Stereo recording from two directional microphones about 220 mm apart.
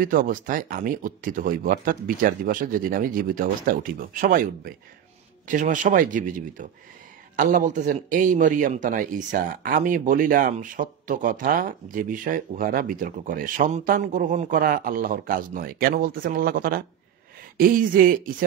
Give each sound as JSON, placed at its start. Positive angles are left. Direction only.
{"t": 0.0, "sound": "a man's voice", "side_deg": -40}